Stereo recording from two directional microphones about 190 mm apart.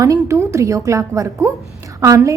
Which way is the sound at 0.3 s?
15° right (ahead or behind).